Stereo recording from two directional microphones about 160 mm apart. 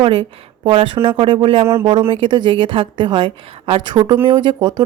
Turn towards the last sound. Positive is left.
turn(degrees=-25)  # may be behind; listen again after turning